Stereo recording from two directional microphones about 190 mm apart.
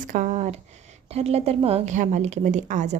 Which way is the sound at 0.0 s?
45° right (ahead or behind).